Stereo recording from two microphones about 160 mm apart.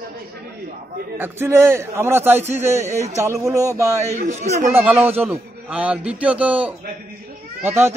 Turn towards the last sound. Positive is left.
turn(degrees=-15)  # may be behind; listen again after turning